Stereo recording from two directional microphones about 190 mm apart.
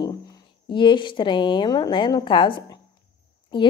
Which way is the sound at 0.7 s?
25° left (ahead or behind).